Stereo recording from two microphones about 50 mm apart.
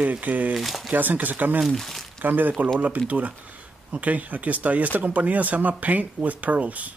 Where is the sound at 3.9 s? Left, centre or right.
Right.